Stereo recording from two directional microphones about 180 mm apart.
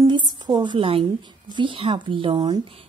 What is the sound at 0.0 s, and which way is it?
A woman's voice, 25° right (ahead or behind).